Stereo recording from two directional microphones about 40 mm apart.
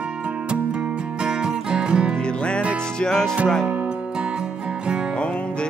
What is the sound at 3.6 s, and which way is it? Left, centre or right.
Music, right.